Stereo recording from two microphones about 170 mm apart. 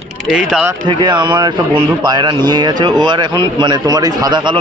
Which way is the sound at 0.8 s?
25° right (ahead or behind).